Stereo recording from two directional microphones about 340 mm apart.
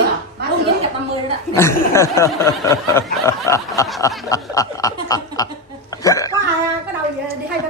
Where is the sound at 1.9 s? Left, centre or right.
Centre.